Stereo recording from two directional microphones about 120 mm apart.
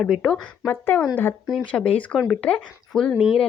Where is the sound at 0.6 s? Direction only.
15° left (ahead or behind).